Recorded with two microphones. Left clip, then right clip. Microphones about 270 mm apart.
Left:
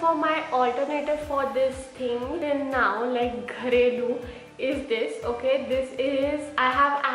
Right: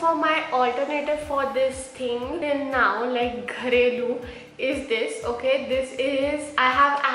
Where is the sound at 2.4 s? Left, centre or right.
Centre.